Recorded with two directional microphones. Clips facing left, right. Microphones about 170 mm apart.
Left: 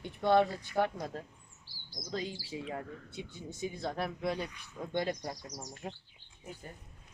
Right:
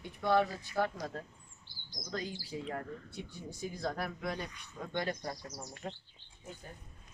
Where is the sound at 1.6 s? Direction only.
5° left (ahead or behind).